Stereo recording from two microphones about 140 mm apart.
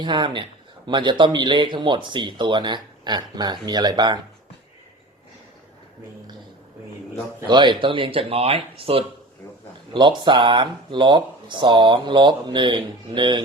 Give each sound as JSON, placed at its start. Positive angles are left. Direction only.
{"t": 0.0, "sound": "speech", "side_deg": -35}
{"t": 7.4, "sound": "speech", "side_deg": -35}